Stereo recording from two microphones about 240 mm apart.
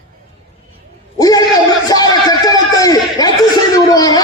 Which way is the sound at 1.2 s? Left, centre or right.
Centre.